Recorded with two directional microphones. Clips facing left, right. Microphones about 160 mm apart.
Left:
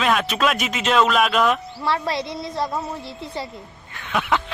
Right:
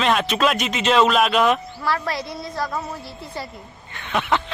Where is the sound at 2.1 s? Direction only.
25° left (ahead or behind).